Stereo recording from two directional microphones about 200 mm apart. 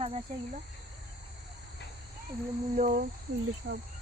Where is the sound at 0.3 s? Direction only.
45° right (ahead or behind).